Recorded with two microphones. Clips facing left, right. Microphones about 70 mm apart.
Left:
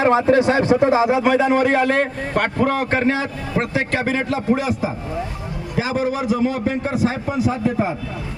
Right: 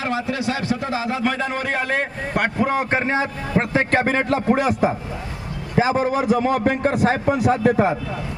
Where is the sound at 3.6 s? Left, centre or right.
Right.